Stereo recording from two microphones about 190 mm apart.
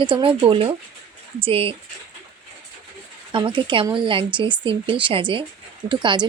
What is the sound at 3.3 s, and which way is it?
Speech, 25° right (ahead or behind).